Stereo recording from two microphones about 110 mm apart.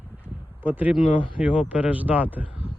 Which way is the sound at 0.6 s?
15° right (ahead or behind).